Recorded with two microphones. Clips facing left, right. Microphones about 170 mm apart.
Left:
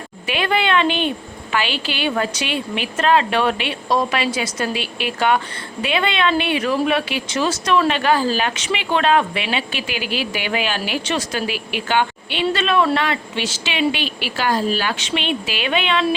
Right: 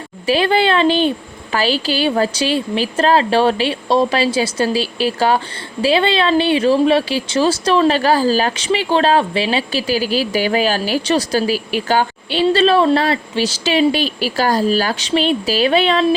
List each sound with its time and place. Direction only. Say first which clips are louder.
0.3 s speech: right 5 dB; 35° right (ahead or behind)